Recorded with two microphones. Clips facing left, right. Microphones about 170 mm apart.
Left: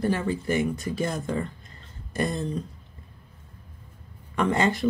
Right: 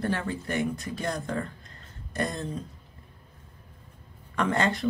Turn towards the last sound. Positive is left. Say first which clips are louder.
# left 3 dB
turn(degrees=5)  # may be behind; listen again after turning